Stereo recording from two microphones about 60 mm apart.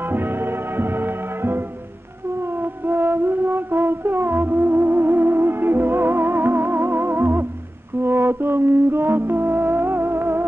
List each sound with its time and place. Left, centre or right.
0.1 s music: right
2.6 s music: right